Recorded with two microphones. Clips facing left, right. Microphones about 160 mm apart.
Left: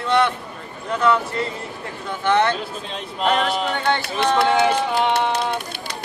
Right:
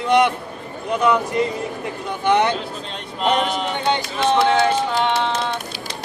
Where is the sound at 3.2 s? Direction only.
Centre (ahead or behind).